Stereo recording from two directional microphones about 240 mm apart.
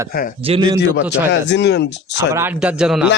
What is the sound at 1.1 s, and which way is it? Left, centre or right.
Speech, left.